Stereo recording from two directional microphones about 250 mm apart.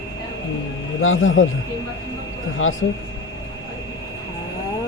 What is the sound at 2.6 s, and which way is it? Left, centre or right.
Speech, left.